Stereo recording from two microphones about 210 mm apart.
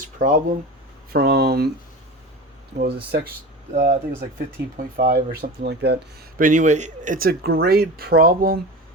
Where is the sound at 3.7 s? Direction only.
35° right (ahead or behind).